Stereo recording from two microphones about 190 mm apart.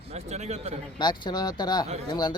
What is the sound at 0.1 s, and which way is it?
Speech, 35° right (ahead or behind).